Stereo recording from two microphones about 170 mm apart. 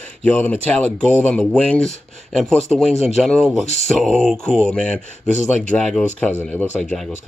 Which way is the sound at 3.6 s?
40° left (ahead or behind).